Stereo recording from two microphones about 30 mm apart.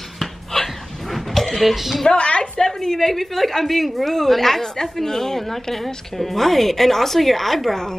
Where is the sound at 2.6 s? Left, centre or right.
Centre.